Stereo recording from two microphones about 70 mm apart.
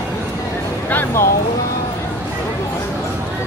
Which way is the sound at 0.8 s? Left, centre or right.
Left.